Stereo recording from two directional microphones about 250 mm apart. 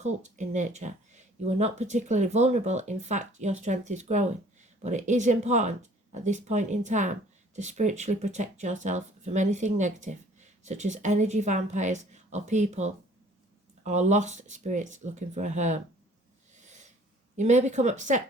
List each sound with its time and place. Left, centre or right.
0.0 s speech: right
16.6 s a sound: right
17.3 s speech: right